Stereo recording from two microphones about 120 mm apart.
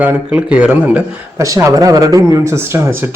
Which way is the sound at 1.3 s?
25° right (ahead or behind).